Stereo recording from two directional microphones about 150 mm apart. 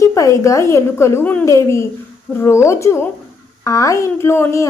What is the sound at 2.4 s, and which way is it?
Speech, 20° left (ahead or behind).